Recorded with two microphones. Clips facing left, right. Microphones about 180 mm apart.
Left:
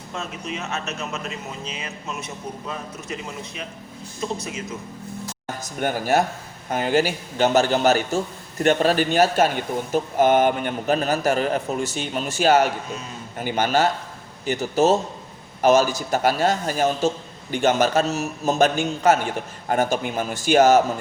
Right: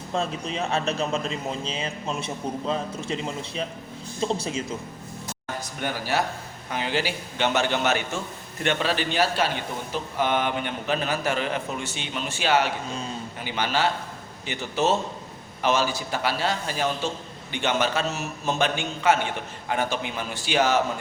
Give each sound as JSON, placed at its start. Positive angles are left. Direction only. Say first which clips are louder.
{"t": 0.1, "sound": "speech", "louder": "right 3 dB", "side_deg": -30}
{"t": 5.6, "sound": "a man's voice", "louder": "left 8 dB", "side_deg": 50}